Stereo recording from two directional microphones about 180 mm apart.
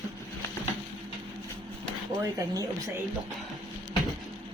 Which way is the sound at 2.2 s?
15° right (ahead or behind).